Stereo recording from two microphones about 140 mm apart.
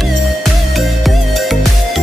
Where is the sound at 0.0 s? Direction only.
Centre (ahead or behind).